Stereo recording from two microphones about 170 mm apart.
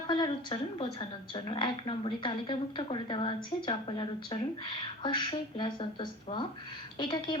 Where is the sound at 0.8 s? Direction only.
30° left (ahead or behind).